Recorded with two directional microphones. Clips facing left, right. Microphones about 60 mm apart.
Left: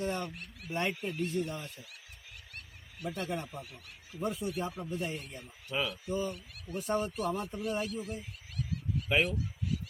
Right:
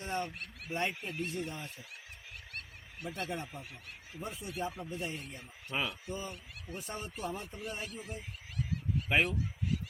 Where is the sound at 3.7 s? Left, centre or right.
Right.